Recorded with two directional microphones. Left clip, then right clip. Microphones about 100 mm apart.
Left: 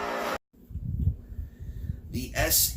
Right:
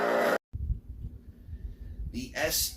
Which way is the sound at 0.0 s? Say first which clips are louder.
Right 5 dB; 45° right (ahead or behind).